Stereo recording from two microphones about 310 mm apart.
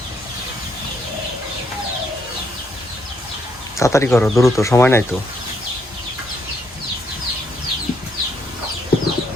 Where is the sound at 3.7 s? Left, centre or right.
Centre.